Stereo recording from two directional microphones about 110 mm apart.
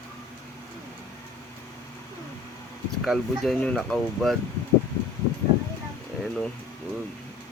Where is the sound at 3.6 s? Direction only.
10° left (ahead or behind).